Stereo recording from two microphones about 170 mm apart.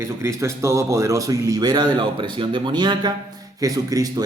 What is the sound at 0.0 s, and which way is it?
Speech, 15° right (ahead or behind).